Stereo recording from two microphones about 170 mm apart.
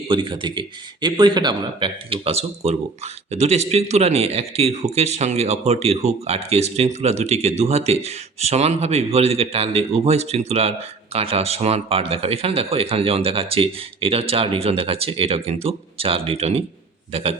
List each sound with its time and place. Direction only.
0.1 s speech: 30° right (ahead or behind)